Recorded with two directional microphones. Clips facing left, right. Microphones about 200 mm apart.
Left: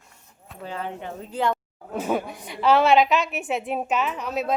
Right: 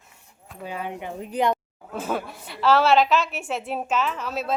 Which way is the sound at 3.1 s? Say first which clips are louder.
Even; centre (ahead or behind).